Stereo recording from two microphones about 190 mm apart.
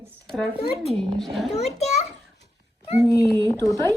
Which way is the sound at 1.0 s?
Centre (ahead or behind).